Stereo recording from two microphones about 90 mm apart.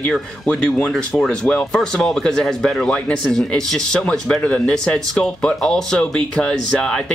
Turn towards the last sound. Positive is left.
turn(degrees=10)  # may be behind; listen again after turning